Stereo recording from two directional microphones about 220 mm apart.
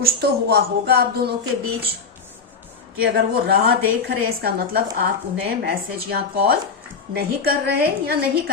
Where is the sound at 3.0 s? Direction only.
45° right (ahead or behind).